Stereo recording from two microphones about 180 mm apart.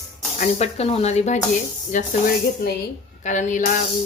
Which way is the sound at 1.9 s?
45° left (ahead or behind).